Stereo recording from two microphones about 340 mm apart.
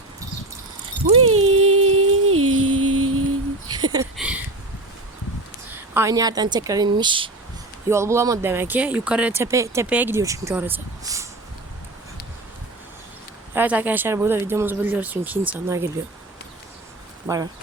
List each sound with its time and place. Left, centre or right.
1.2 s a sound: right
1.6 s music: right
3.7 s a sound: centre
5.9 s speech: centre
13.5 s speech: centre
17.2 s speech: centre